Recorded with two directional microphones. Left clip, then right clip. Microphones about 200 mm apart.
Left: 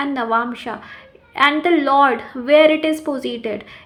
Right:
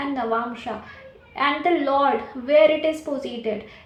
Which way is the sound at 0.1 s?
45° left (ahead or behind).